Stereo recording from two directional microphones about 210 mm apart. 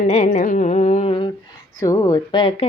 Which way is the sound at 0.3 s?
40° left (ahead or behind).